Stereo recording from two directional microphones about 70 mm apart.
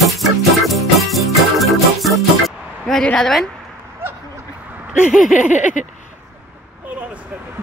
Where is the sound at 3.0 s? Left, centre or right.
Centre.